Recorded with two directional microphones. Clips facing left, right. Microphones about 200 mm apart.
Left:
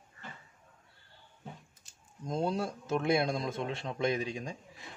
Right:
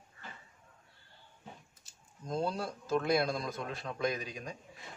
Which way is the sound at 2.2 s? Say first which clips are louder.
Left 2 dB; 25° left (ahead or behind).